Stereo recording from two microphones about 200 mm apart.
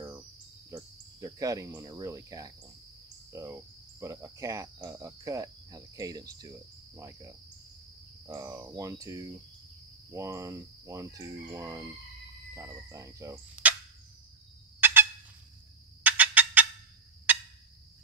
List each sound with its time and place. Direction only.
0.7 s cricket: 15° right (ahead or behind)
16.0 s fowl: 10° right (ahead or behind)
17.3 s turkey: 10° right (ahead or behind)